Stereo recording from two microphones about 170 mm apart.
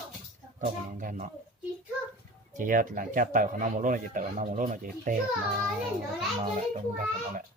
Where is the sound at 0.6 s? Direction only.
50° right (ahead or behind).